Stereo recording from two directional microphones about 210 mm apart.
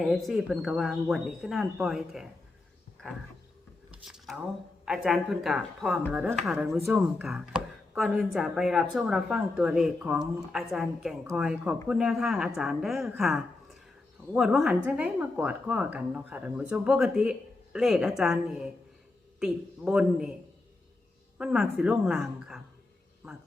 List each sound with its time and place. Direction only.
0.0 s speech: centre (ahead or behind)
4.0 s a sound: centre (ahead or behind)
4.9 s speech: centre (ahead or behind)
21.3 s speech: 5° right (ahead or behind)